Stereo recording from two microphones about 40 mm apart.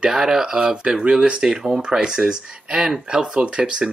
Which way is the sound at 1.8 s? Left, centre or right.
Right.